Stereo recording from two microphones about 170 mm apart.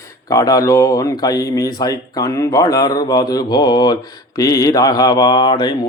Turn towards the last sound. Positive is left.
turn(degrees=25)  # may be behind; listen again after turning